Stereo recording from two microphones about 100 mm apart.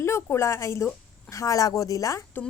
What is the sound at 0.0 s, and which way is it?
A woman's voice, 25° left (ahead or behind).